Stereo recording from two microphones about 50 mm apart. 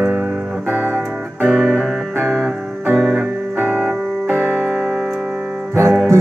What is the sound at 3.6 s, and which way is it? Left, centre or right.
Keyboard, right.